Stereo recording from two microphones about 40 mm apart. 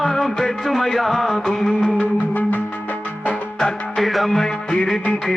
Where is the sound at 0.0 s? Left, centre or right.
Centre.